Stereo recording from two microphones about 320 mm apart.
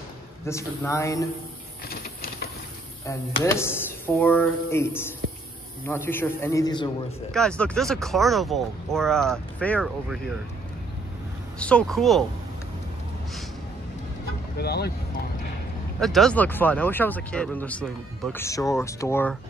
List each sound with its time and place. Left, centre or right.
0.5 s speech: centre
1.9 s printer: left
3.1 s speech: centre
11.6 s speech: centre
14.6 s speech: left
16.0 s speech: centre